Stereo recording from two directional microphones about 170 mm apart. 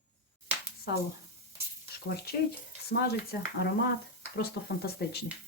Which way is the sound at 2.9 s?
70° left (ahead or behind).